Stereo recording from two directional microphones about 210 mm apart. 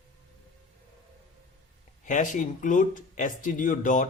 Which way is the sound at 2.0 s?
35° left (ahead or behind).